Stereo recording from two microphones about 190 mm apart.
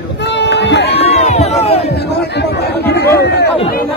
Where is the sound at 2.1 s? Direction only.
60° left (ahead or behind).